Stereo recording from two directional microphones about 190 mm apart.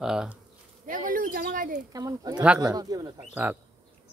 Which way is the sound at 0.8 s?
45° right (ahead or behind).